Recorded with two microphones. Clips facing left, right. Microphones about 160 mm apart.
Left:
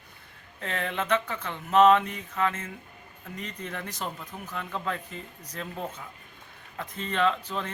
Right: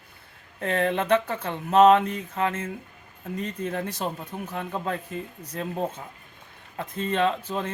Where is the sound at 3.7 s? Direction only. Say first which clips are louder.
Right 6 dB; 30° right (ahead or behind).